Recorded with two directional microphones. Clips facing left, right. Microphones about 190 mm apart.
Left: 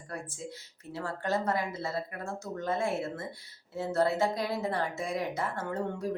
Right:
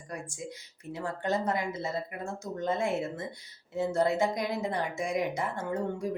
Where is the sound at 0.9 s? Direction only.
20° right (ahead or behind).